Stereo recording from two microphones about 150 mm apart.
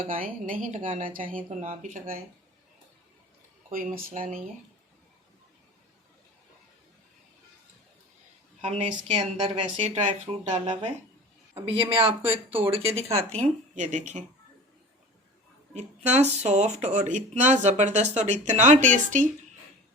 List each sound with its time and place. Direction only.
0.0 s speech: 65° right (ahead or behind)
3.7 s speech: 65° right (ahead or behind)
8.6 s speech: 50° right (ahead or behind)
9.4 s speech: 35° right (ahead or behind)
12.8 s speech: 20° right (ahead or behind)
13.3 s speech: 50° right (ahead or behind)
15.7 s speech: 45° right (ahead or behind)